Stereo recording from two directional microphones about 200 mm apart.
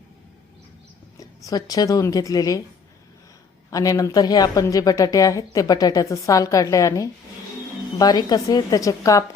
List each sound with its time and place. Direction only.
1.2 s speech: 20° left (ahead or behind)
3.7 s speech: 20° left (ahead or behind)